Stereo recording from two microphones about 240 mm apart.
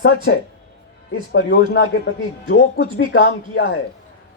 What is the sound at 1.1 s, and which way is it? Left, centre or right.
Speech, left.